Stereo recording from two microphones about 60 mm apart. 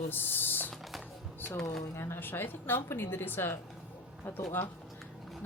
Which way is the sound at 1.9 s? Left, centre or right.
Left.